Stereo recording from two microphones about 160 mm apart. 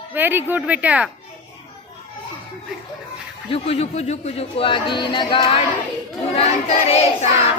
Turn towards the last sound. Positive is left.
turn(degrees=40)  # may be behind; listen again after turning